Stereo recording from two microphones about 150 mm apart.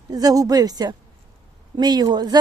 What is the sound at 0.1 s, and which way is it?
Speech, 25° right (ahead or behind).